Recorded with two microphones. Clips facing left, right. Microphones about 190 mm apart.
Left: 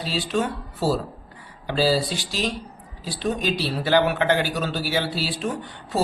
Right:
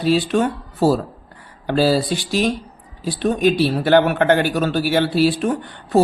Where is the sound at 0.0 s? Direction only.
55° right (ahead or behind).